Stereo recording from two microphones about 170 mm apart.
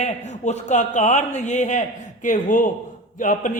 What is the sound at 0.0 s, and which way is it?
A man's voice, 40° left (ahead or behind).